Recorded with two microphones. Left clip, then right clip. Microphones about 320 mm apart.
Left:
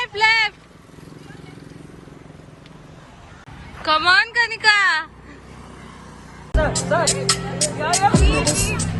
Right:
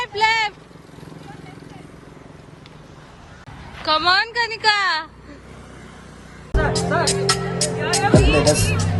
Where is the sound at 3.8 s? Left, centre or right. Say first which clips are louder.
Left 2 dB; centre.